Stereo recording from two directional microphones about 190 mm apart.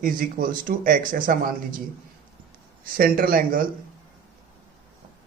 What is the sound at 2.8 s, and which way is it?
Speech, 50° right (ahead or behind).